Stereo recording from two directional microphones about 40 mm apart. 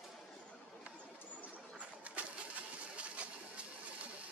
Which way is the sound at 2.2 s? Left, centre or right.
Right.